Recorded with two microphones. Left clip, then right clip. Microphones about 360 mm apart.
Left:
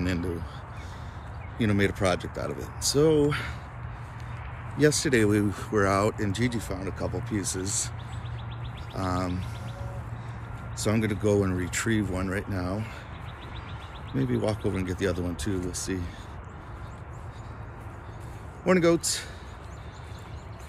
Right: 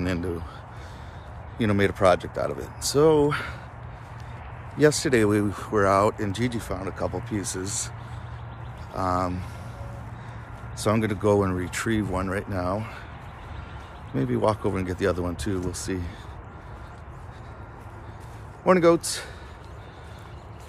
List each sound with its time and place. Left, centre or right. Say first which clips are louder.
0.0 s speech: right 2 dB; centre
1.6 s speech: right 4 dB; centre
4.7 s speech: right 3 dB; centre
8.9 s speech: right 5 dB; centre
10.8 s speech: right 3 dB; centre
14.1 s speech: right 5 dB; centre
18.7 s speech: right 4 dB; centre